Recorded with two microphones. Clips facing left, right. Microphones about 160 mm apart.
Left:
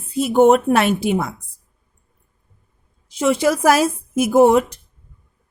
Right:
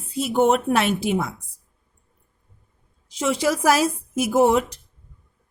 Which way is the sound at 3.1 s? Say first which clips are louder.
Left 5 dB; 55° left (ahead or behind).